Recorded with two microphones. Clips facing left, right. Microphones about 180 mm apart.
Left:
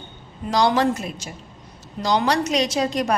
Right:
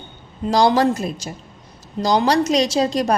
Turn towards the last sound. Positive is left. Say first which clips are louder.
# right 3 dB
turn(degrees=-35)  # may be behind; listen again after turning